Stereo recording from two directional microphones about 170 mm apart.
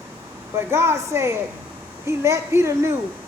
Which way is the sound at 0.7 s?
15° right (ahead or behind).